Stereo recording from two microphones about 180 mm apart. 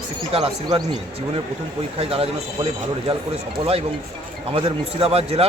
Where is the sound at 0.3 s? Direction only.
30° right (ahead or behind).